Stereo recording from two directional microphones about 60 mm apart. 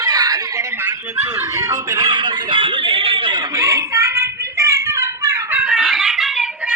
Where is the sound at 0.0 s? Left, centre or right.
Right.